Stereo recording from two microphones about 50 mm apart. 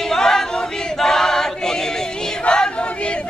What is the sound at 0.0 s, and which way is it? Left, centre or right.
Choir, centre.